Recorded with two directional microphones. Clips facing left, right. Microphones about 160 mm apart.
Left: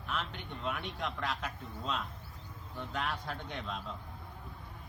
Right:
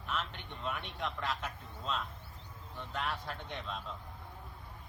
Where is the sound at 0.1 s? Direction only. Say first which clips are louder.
Left 1 dB; centre (ahead or behind).